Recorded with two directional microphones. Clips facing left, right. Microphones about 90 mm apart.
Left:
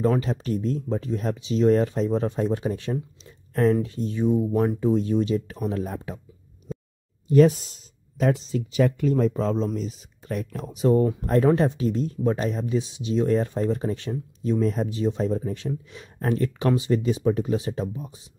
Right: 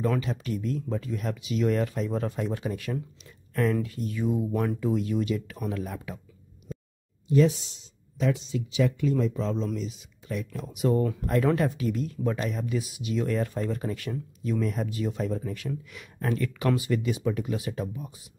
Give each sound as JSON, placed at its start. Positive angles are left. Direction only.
{"t": 0.0, "sound": "speech", "side_deg": 35}
{"t": 6.7, "sound": "a sound", "side_deg": 5}
{"t": 7.2, "sound": "speech", "side_deg": 50}